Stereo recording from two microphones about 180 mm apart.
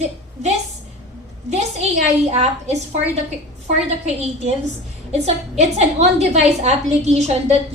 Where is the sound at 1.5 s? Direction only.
40° right (ahead or behind).